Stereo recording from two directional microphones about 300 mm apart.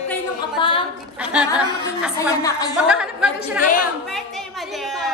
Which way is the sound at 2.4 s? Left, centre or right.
Centre.